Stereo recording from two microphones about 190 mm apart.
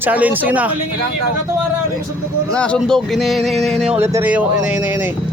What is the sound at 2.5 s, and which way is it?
Speech, 5° left (ahead or behind).